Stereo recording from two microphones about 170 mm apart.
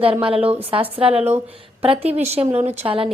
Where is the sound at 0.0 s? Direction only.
30° right (ahead or behind).